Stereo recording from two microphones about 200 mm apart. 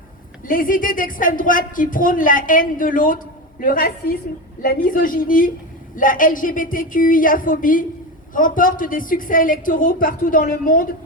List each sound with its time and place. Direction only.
0.4 s speech: 45° left (ahead or behind)